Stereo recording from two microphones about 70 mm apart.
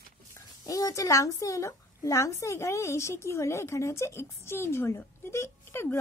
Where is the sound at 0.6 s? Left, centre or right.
Left.